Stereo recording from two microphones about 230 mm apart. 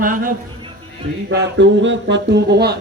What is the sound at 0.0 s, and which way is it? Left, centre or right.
Speech, right.